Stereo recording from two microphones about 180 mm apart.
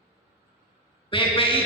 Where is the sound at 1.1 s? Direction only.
30° left (ahead or behind).